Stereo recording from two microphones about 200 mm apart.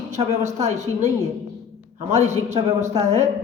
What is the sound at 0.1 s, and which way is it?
Speech, 35° right (ahead or behind).